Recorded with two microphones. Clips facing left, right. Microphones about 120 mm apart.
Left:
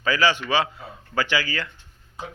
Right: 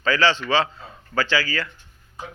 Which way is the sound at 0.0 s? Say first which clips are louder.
Right 1 dB; 15° left (ahead or behind).